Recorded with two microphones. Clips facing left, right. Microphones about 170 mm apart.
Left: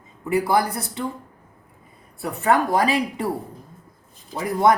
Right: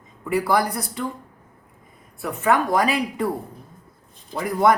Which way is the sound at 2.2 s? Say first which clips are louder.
Left 1 dB; 30° left (ahead or behind).